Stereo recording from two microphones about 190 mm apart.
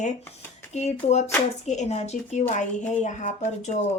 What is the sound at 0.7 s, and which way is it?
Speech, 35° left (ahead or behind).